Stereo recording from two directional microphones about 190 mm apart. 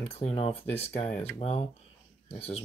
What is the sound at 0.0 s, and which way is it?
Speech, 35° left (ahead or behind).